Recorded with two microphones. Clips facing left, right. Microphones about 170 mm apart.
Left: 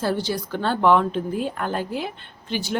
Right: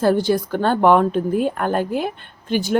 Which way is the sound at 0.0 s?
50° right (ahead or behind).